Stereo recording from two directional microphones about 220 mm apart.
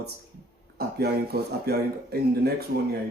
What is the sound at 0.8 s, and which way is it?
Speech, 45° right (ahead or behind).